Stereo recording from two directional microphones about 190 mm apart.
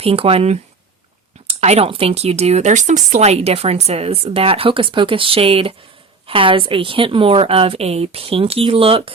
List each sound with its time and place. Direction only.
0.0 s a woman's voice: 30° right (ahead or behind)